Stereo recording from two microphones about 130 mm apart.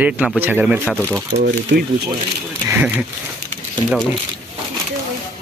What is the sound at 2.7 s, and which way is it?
Speech, 10° right (ahead or behind).